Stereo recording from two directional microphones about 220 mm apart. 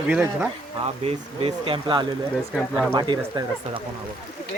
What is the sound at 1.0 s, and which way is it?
Speech, 25° right (ahead or behind).